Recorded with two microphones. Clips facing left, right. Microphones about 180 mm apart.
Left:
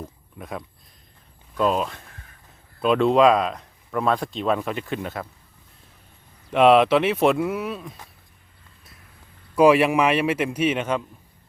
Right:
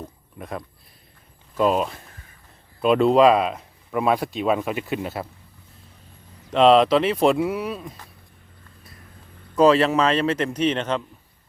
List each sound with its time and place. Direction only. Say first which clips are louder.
0.3 s speech: right 1 dB; centre (ahead or behind)
6.5 s speech: even; 5° left (ahead or behind)
9.6 s a man's voice: even; 10° left (ahead or behind)